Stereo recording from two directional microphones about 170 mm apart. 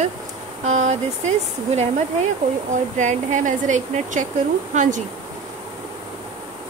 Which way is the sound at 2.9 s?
45° right (ahead or behind).